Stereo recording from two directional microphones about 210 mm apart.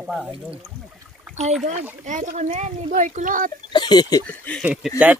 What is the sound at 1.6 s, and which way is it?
Speech, 35° right (ahead or behind).